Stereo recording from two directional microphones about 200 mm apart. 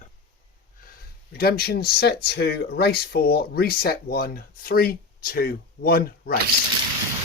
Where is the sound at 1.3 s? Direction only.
50° left (ahead or behind).